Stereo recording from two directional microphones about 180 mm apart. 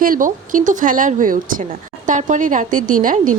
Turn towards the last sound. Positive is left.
turn(degrees=-50)  # may be behind; listen again after turning